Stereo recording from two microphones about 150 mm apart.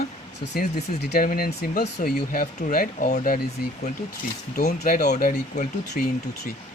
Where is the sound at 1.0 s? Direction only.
80° left.